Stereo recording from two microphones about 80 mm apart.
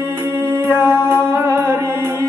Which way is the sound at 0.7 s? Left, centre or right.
Right.